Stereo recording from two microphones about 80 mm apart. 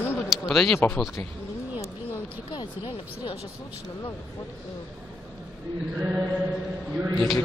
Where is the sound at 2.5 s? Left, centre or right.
Left.